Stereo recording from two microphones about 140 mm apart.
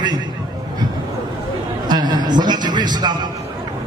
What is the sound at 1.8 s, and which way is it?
A man's voice, 30° right (ahead or behind).